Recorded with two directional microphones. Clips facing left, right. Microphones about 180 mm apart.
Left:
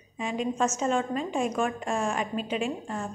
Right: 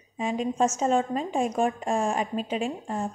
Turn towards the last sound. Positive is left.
turn(degrees=-35)  # may be behind; listen again after turning